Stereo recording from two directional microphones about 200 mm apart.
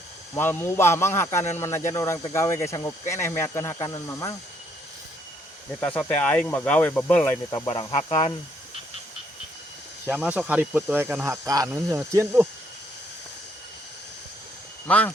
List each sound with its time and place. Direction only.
0.3 s speech: 10° left (ahead or behind)
5.8 s speech: 5° left (ahead or behind)
7.7 s speech: 30° left (ahead or behind)
10.1 s speech: 5° right (ahead or behind)
14.8 s speech: 5° left (ahead or behind)